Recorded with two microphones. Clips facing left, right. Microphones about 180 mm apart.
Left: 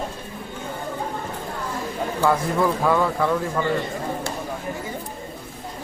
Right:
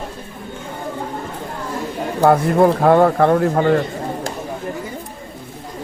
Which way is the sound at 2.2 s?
60° right (ahead or behind).